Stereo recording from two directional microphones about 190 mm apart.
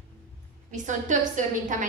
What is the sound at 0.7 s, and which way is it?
A woman's voice, 40° right (ahead or behind).